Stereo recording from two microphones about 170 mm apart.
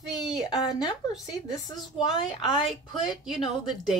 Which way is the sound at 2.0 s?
5° right (ahead or behind).